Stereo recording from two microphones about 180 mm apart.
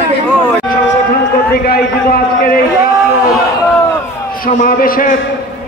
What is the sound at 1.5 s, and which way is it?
A man's voice, 55° left (ahead or behind).